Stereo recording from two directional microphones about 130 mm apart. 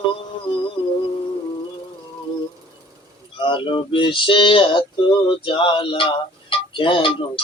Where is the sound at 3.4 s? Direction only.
40° left (ahead or behind).